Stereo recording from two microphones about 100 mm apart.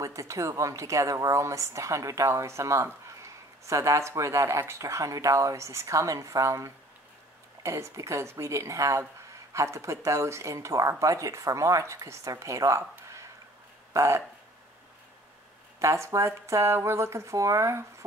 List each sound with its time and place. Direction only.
0.0 s a woman's voice: 30° right (ahead or behind)
15.8 s speech: 30° right (ahead or behind)